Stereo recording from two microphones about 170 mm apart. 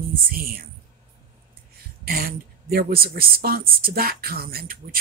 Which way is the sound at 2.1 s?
60° right (ahead or behind).